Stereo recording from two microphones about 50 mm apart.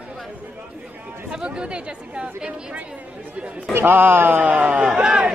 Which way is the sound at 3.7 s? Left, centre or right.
Right.